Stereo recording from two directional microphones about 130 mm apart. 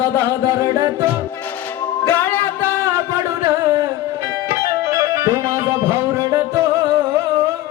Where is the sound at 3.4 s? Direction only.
25° right (ahead or behind).